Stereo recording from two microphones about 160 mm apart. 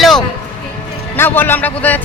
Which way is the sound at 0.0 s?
Centre (ahead or behind).